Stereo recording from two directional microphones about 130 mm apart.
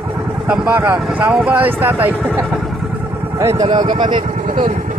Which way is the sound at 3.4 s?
20° right (ahead or behind).